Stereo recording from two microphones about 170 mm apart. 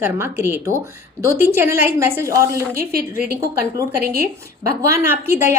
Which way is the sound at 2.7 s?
65° right (ahead or behind).